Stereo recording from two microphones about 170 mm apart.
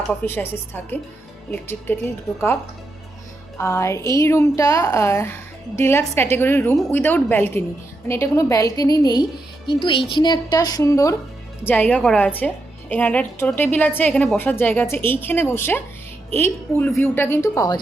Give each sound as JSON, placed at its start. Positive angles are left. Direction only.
{"t": 0.1, "sound": "a woman's voice", "side_deg": 10}
{"t": 3.6, "sound": "a woman's voice", "side_deg": 15}